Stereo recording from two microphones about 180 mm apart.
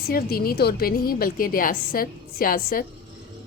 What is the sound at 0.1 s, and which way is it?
A woman's voice, 55° left (ahead or behind).